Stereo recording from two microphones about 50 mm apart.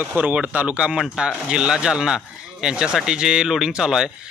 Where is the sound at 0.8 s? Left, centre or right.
Centre.